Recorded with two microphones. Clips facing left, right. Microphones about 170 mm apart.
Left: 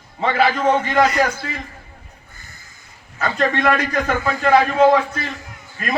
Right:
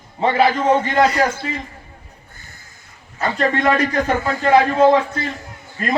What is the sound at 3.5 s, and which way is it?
Speech, 25° right (ahead or behind).